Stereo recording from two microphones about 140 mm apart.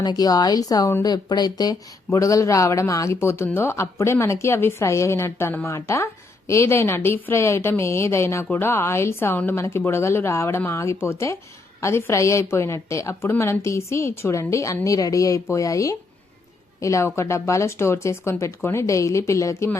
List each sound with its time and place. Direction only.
0.0 s speech: 30° left (ahead or behind)